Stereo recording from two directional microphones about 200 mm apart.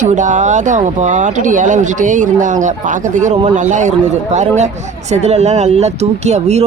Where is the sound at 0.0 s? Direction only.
40° right (ahead or behind).